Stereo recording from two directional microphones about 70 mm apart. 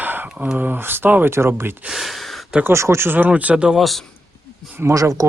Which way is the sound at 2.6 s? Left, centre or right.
Right.